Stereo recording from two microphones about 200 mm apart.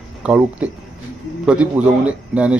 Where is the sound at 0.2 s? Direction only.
5° right (ahead or behind).